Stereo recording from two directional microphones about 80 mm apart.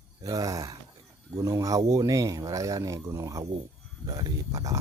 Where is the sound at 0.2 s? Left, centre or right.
Right.